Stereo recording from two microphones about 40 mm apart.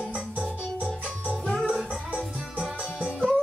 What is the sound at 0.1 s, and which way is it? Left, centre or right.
Music, right.